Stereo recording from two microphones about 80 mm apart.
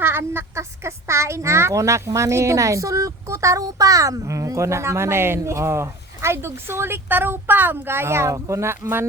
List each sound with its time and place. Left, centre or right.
0.0 s speech: right